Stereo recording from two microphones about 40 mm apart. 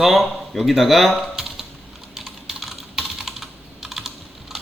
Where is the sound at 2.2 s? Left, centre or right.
Centre.